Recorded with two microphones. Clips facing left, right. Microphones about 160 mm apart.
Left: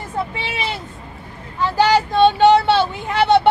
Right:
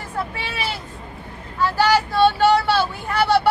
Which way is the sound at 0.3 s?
20° left (ahead or behind).